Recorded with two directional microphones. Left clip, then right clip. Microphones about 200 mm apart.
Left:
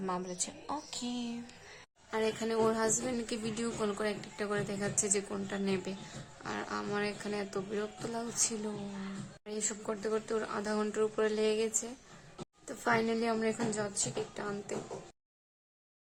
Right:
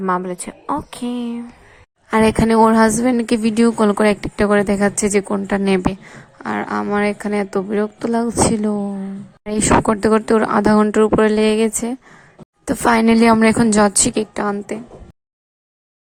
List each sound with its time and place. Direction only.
0.0 s a woman's voice: 20° right (ahead or behind)
2.0 s a woman's voice: 50° right (ahead or behind)